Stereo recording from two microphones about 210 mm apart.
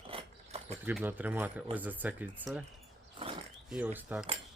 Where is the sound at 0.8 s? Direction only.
10° right (ahead or behind).